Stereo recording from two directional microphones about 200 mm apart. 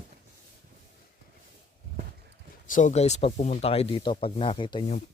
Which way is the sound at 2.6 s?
40° left (ahead or behind).